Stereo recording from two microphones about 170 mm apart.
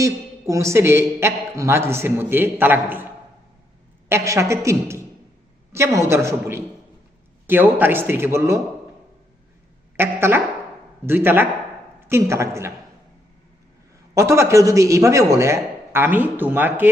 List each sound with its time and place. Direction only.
0.0 s a man's voice: 20° right (ahead or behind)
4.1 s a man's voice: 15° right (ahead or behind)
10.0 s a man's voice: 15° right (ahead or behind)
14.1 s a man's voice: 15° right (ahead or behind)